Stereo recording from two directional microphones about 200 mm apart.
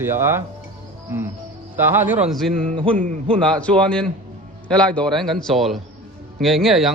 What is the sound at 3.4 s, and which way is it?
Speech, 5° left (ahead or behind).